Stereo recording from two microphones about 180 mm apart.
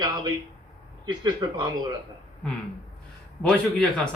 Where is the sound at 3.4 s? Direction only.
5° left (ahead or behind).